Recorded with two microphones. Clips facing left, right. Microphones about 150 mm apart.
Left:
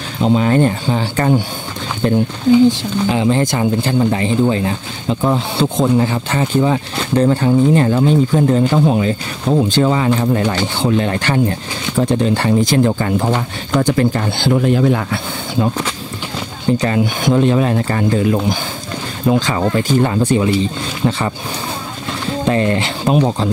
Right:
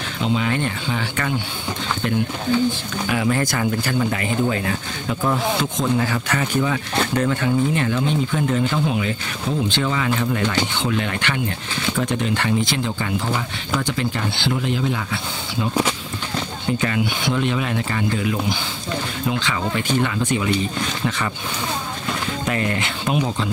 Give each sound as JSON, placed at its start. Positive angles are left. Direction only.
{"t": 0.2, "sound": "speech", "side_deg": 40}
{"t": 3.1, "sound": "speech", "side_deg": 25}
{"t": 16.6, "sound": "speech", "side_deg": 35}
{"t": 22.4, "sound": "speech", "side_deg": 30}